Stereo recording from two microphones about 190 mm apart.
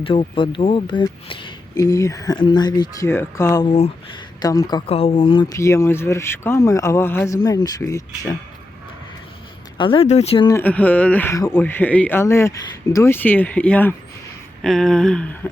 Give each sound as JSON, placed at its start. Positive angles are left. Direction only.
{"t": 0.0, "sound": "speech", "side_deg": 30}
{"t": 4.4, "sound": "speech", "side_deg": 20}
{"t": 9.7, "sound": "speech", "side_deg": 25}
{"t": 10.5, "sound": "speech", "side_deg": 10}
{"t": 14.6, "sound": "a sound", "side_deg": 5}